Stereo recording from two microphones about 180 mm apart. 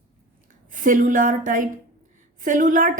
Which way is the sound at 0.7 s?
45° right (ahead or behind).